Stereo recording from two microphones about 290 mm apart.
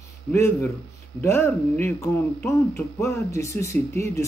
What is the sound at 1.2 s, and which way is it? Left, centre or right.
Speech, centre.